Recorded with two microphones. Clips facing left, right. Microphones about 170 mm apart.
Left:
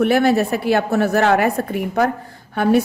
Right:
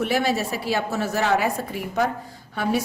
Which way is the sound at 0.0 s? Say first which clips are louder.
Left 8 dB; 60° left (ahead or behind).